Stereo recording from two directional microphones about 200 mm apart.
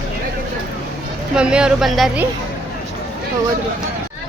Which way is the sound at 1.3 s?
5° right (ahead or behind).